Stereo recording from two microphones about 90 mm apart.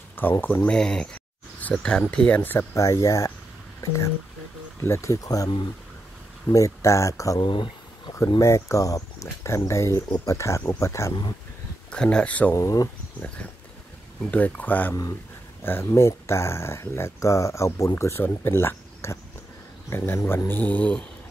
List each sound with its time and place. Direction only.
0.1 s speech: 20° left (ahead or behind)
0.7 s speech: 10° left (ahead or behind)
2.7 s speech: 35° left (ahead or behind)
6.5 s speech: 35° left (ahead or behind)
7.3 s speech: 65° left (ahead or behind)
8.4 s speech: 35° left (ahead or behind)
11.9 s speech: 10° left (ahead or behind)
12.5 s speech: 40° left (ahead or behind)
14.3 s speech: 20° left (ahead or behind)